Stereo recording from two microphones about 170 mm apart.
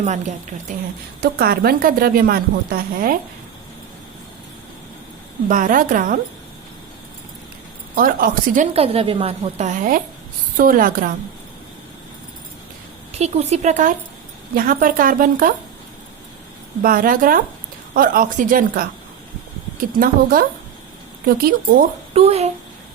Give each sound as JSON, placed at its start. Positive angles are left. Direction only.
{"t": 0.0, "sound": "a woman's voice", "side_deg": -45}
{"t": 1.2, "sound": "speech", "side_deg": -65}
{"t": 5.5, "sound": "a woman's voice", "side_deg": -50}
{"t": 7.9, "sound": "speech", "side_deg": -55}
{"t": 8.7, "sound": "a woman's voice", "side_deg": -35}
{"t": 13.1, "sound": "a woman's voice", "side_deg": -40}
{"t": 14.5, "sound": "speech", "side_deg": -55}
{"t": 16.8, "sound": "speech", "side_deg": -60}
{"t": 21.2, "sound": "speech", "side_deg": -60}
{"t": 22.1, "sound": "a woman's voice", "side_deg": -35}